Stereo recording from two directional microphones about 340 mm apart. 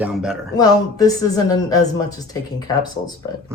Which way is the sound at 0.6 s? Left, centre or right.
Centre.